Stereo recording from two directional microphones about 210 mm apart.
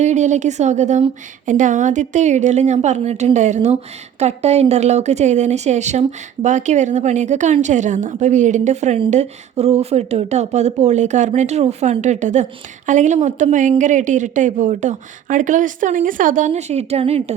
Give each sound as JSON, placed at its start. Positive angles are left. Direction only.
{"t": 0.0, "sound": "speech", "side_deg": -35}